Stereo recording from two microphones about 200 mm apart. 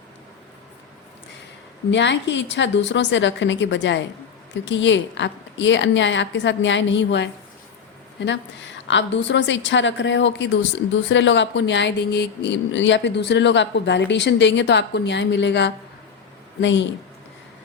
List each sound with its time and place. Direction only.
1.9 s a woman's voice: 60° left (ahead or behind)